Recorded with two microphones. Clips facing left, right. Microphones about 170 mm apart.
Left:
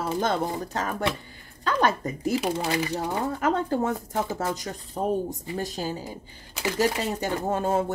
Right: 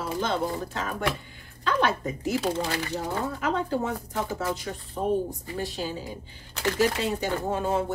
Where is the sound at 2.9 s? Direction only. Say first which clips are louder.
Left 2 dB; 50° left (ahead or behind).